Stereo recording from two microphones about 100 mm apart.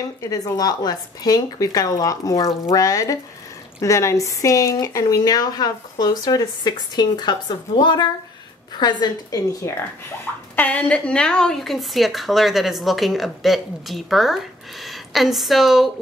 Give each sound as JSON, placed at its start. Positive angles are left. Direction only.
{"t": 0.2, "sound": "a woman's voice", "side_deg": 35}
{"t": 9.6, "sound": "speech", "side_deg": 30}
{"t": 10.5, "sound": "a woman's voice", "side_deg": 15}